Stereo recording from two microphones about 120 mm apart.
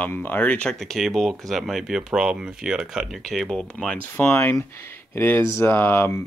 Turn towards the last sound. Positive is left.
turn(degrees=20)  # may be behind; listen again after turning